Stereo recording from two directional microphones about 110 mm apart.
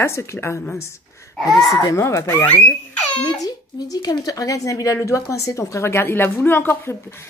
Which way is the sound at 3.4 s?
35° left (ahead or behind).